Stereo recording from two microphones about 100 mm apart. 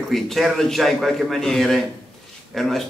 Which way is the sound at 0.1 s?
Centre (ahead or behind).